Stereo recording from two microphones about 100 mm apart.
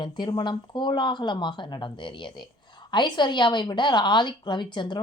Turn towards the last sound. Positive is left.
turn(degrees=50)  # may be behind; listen again after turning